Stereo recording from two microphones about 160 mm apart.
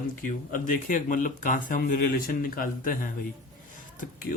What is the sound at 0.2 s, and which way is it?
Speech, 55° left (ahead or behind).